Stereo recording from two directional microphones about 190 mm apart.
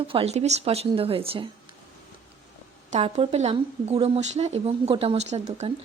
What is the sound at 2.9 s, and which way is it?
Speech, 35° right (ahead or behind).